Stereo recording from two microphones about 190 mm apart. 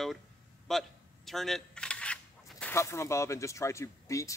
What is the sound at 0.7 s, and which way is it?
Single-lens reflex camera, centre (ahead or behind).